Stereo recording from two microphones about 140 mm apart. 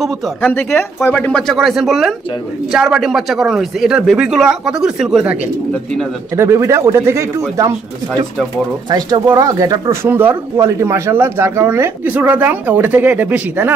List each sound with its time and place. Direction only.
0.0 s speech: 10° left (ahead or behind); by 5.4 s 5° right (ahead or behind)
6.3 s speech: 20° right (ahead or behind)
8.9 s speech: 25° right (ahead or behind)